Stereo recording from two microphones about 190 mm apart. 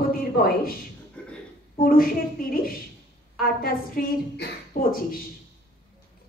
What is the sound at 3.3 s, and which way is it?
A woman's voice, 50° left (ahead or behind).